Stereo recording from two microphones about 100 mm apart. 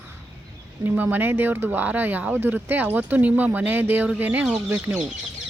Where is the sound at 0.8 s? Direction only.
20° right (ahead or behind).